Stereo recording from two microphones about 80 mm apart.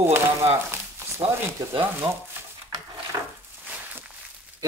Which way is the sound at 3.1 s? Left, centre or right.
Right.